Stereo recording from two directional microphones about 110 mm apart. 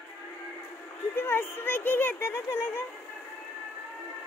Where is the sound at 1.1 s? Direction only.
20° left (ahead or behind).